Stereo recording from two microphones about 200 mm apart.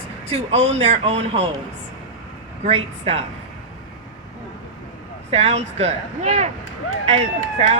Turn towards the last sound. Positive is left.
turn(degrees=-30)  # may be behind; listen again after turning